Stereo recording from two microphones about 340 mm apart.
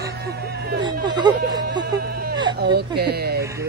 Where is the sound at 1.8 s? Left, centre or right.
Right.